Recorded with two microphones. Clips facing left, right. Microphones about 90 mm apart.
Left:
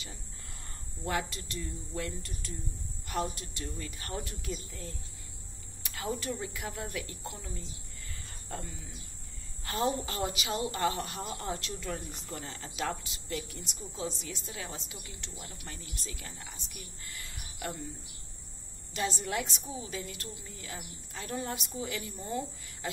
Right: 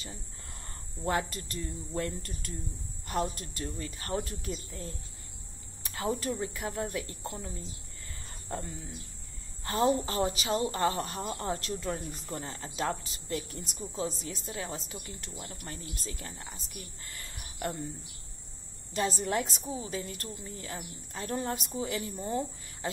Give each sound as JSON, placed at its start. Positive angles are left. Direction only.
{"t": 1.0, "sound": "a woman's voice", "side_deg": -40}
{"t": 18.9, "sound": "a woman's voice", "side_deg": -40}